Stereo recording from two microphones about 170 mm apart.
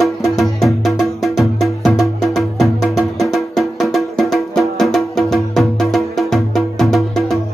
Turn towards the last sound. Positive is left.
turn(degrees=0)  # may be behind; listen again after turning